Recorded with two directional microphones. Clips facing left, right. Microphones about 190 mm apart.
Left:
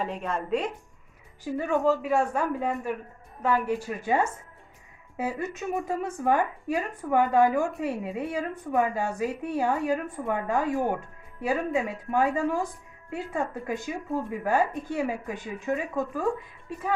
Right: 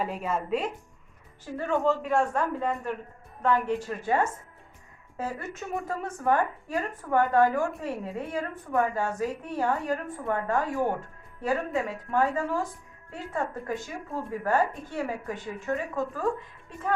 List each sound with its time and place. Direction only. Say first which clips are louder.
0.0 s a man's voice: right 1 dB; 5° right (ahead or behind)
1.5 s a woman's voice: left 2 dB; 10° left (ahead or behind)